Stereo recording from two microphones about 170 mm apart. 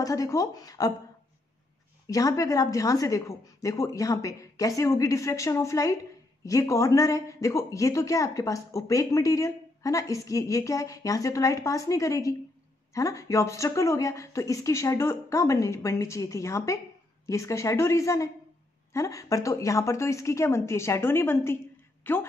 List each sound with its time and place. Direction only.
0.0 s a woman's voice: 20° left (ahead or behind)
2.0 s a woman's voice: 20° left (ahead or behind)